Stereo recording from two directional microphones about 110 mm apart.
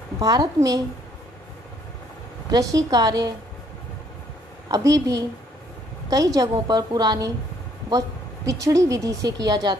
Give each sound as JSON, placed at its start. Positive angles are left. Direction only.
{"t": 0.2, "sound": "a woman's voice", "side_deg": -35}
{"t": 2.5, "sound": "a woman's voice", "side_deg": -35}
{"t": 4.6, "sound": "a woman's voice", "side_deg": -35}
{"t": 8.5, "sound": "a woman's voice", "side_deg": -30}